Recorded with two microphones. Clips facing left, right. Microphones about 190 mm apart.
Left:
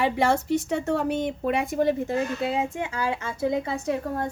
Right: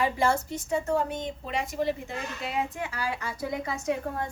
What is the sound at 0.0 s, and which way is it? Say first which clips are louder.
Speech: left 3 dB; 70° left (ahead or behind).